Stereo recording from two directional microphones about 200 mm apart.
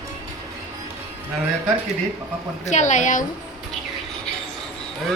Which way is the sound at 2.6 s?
35° left (ahead or behind).